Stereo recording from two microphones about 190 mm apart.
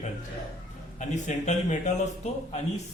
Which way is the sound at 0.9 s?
40° left (ahead or behind).